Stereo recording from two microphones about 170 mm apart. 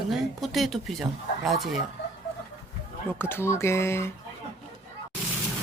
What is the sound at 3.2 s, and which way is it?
Speech, 15° left (ahead or behind).